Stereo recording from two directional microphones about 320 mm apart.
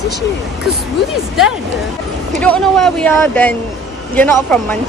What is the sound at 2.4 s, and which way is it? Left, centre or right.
Speech, centre.